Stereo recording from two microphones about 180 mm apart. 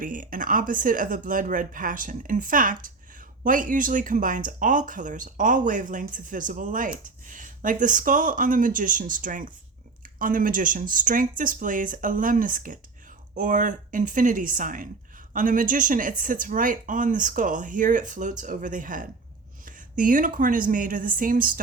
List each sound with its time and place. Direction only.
0.0 s speech: 50° right (ahead or behind)